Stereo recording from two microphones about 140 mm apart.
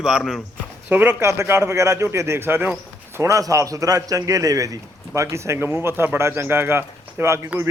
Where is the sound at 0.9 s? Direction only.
15° right (ahead or behind).